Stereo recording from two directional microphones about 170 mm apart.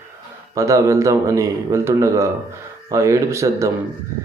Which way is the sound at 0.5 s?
20° right (ahead or behind).